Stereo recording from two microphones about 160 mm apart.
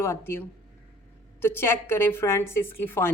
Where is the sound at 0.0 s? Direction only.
15° left (ahead or behind).